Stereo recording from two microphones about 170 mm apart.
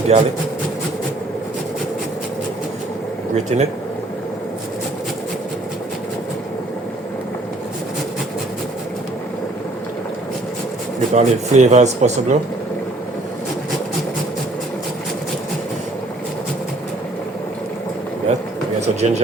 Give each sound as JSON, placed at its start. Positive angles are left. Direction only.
{"t": 0.1, "sound": "speech", "side_deg": -40}
{"t": 3.3, "sound": "speech", "side_deg": -40}
{"t": 11.1, "sound": "speech", "side_deg": -45}
{"t": 18.8, "sound": "speech", "side_deg": -40}